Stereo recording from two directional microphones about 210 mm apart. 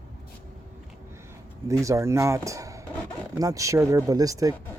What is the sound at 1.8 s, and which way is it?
Speech, 15° right (ahead or behind).